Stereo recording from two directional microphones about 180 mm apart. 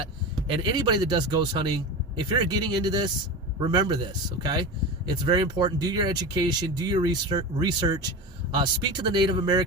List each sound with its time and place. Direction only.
0.4 s speech: 25° right (ahead or behind)
5.0 s speech: 25° right (ahead or behind)